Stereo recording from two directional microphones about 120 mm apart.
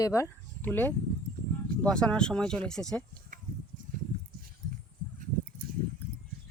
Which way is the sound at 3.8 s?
90° right.